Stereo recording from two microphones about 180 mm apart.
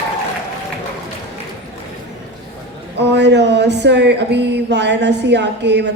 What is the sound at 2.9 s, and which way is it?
Speech, 70° right (ahead or behind).